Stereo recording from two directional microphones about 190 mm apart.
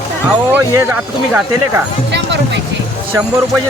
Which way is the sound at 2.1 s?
65° right (ahead or behind).